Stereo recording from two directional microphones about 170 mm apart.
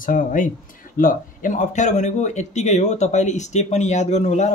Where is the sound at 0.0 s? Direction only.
50° left (ahead or behind).